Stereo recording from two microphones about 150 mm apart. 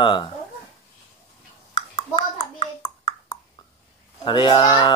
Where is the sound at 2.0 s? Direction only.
30° left (ahead or behind).